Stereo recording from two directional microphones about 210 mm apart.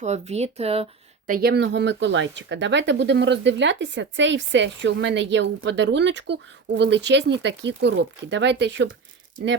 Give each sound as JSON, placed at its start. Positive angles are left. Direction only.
{"t": 0.0, "sound": "speech", "side_deg": -30}
{"t": 1.3, "sound": "speech", "side_deg": -50}